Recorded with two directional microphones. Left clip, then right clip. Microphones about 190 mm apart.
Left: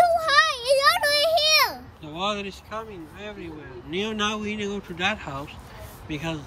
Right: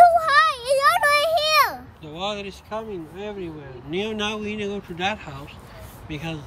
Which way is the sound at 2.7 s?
20° right (ahead or behind).